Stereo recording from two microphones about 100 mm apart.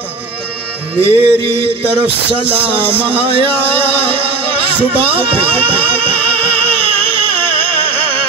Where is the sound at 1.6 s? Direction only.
70° right (ahead or behind).